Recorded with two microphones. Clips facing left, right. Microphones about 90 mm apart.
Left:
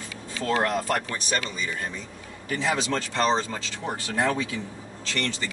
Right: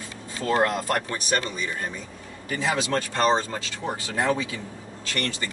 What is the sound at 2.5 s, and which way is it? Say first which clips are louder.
Speech: right 1 dB; 15° right (ahead or behind).